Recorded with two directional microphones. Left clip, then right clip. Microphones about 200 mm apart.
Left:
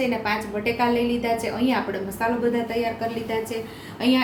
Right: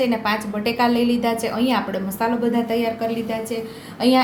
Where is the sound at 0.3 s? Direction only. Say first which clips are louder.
Right 2 dB; 45° right (ahead or behind).